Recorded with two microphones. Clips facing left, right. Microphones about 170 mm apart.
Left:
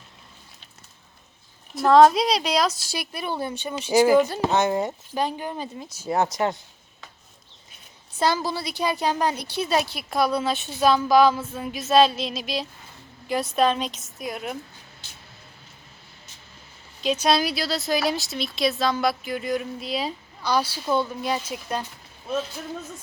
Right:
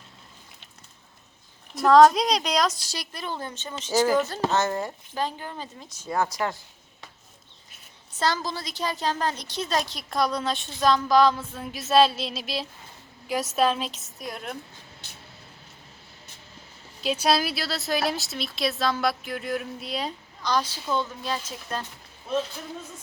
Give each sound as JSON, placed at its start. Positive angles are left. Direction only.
{"t": 1.7, "sound": "a woman's voice", "side_deg": 0}
{"t": 6.1, "sound": "speech", "side_deg": 20}
{"t": 8.2, "sound": "a woman's voice", "side_deg": 10}
{"t": 17.0, "sound": "a woman's voice", "side_deg": -5}